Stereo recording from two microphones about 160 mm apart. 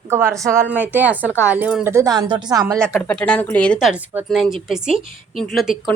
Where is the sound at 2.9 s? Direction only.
10° left (ahead or behind).